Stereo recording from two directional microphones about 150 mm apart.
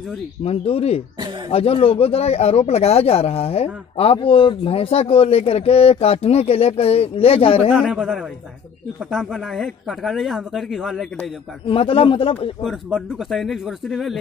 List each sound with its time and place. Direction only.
0.4 s speech: 40° left (ahead or behind)
7.7 s speech: 5° right (ahead or behind)
11.6 s speech: 35° left (ahead or behind)
12.6 s speech: centre (ahead or behind)